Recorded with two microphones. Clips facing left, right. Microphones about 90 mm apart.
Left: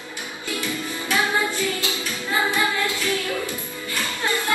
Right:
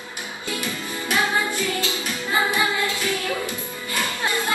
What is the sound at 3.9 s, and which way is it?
Music, 20° right (ahead or behind).